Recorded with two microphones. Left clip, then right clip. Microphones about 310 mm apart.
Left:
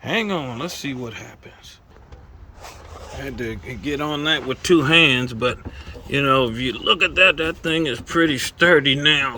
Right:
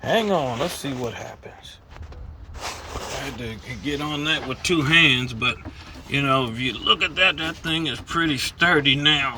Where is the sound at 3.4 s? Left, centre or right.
Centre.